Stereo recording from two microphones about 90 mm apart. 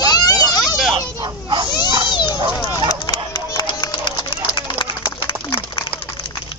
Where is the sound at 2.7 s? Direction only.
40° left (ahead or behind).